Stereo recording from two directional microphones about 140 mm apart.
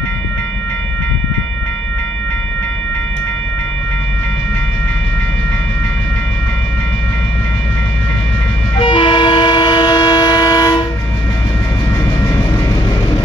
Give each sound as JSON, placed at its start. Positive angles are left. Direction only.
{"t": 8.7, "sound": "train", "side_deg": 35}